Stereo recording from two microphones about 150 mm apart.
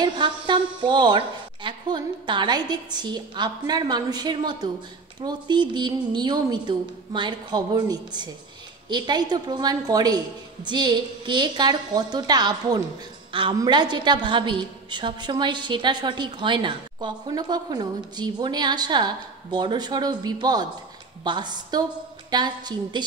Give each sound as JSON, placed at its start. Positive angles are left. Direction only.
{"t": 0.0, "sound": "a woman's voice", "side_deg": -30}